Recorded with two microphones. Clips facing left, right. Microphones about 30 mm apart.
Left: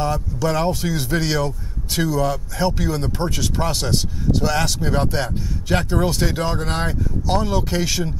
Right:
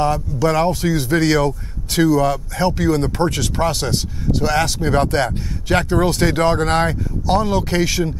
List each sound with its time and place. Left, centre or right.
0.0 s speech: centre
1.4 s speech: right
3.2 s speech: right
3.5 s speech: centre